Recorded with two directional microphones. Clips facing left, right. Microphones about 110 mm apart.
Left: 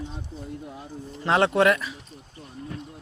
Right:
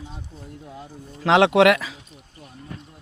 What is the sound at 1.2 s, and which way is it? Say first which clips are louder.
Speech: right 5 dB; 90° right.